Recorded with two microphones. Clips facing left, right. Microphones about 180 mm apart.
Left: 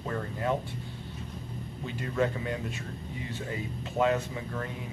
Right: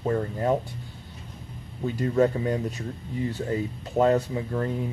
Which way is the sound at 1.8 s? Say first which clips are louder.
Right 8 dB; 40° right (ahead or behind).